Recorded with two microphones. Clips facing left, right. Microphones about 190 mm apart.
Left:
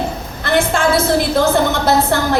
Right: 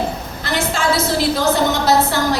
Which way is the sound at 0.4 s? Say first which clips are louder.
Left 4 dB; 55° left (ahead or behind).